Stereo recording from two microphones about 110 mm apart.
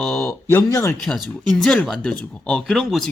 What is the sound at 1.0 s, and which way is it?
Speech, 5° left (ahead or behind).